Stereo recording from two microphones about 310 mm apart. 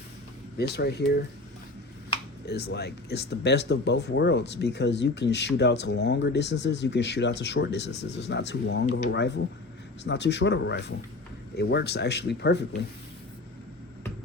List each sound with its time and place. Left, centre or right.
0.5 s speech: left
2.5 s speech: left